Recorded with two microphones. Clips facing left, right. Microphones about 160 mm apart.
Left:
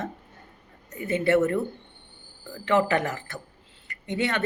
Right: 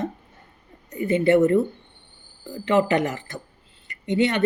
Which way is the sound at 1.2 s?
15° right (ahead or behind).